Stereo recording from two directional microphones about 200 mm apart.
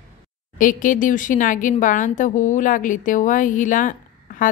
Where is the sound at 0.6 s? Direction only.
40° left (ahead or behind).